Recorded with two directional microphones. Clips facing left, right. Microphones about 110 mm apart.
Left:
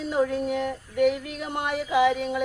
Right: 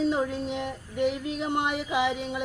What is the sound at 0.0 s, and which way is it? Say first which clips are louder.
Female singing: left 2 dB; 20° right (ahead or behind).